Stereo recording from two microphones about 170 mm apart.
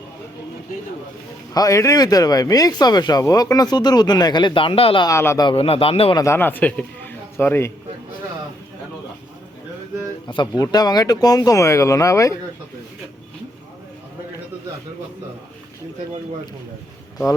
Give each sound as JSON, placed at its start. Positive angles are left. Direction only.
{"t": 1.5, "sound": "speech", "side_deg": 20}
{"t": 5.0, "sound": "speech", "side_deg": 15}
{"t": 5.5, "sound": "a man's voice", "side_deg": 35}
{"t": 6.1, "sound": "a man's voice", "side_deg": 15}
{"t": 10.2, "sound": "speech", "side_deg": 30}